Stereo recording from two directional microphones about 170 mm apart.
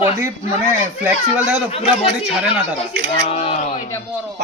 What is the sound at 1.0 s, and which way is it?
Speech, 10° right (ahead or behind).